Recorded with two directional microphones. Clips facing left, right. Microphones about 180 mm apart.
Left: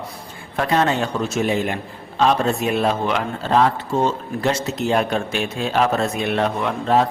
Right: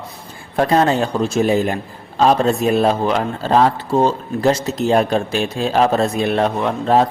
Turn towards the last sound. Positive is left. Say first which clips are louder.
# right 3 dB
turn(degrees=-35)  # may be behind; listen again after turning